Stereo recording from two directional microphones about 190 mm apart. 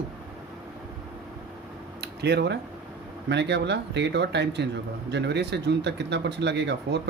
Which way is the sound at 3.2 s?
65° right (ahead or behind).